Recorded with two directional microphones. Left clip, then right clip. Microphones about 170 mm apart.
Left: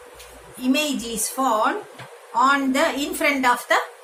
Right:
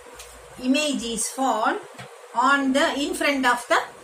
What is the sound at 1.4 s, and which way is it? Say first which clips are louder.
A woman's voice: left 2 dB; 40° left (ahead or behind).